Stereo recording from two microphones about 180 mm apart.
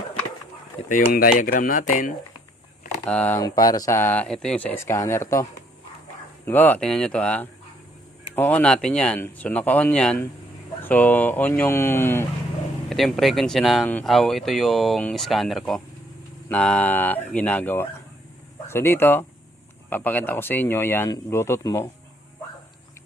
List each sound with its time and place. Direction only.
0.9 s speech: 45° left (ahead or behind)
3.1 s speech: 10° left (ahead or behind)
3.4 s speech: 20° left (ahead or behind)
12.9 s speech: centre (ahead or behind)